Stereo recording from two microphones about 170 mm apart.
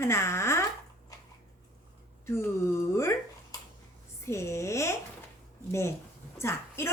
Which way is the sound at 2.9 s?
15° left (ahead or behind).